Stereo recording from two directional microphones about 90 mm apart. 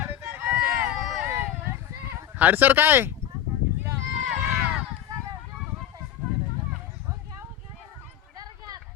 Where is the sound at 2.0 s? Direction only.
25° right (ahead or behind).